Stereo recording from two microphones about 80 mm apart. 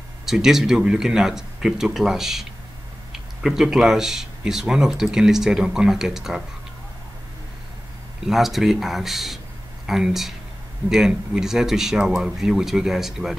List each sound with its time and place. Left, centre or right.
0.2 s speech: centre
8.2 s speech: centre